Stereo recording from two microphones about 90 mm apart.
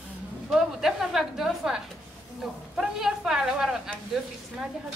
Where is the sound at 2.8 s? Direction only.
5° right (ahead or behind).